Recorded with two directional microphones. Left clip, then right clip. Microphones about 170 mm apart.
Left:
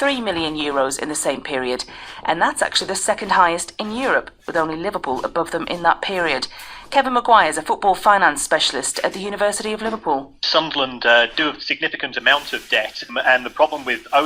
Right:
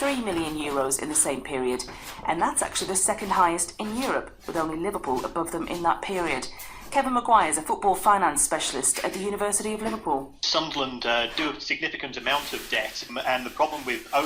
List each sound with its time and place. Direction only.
0.0 s a man's voice: 35° left (ahead or behind)
10.4 s a man's voice: 25° left (ahead or behind)